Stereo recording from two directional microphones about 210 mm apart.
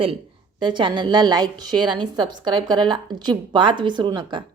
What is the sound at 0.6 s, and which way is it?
A woman's voice, 20° right (ahead or behind).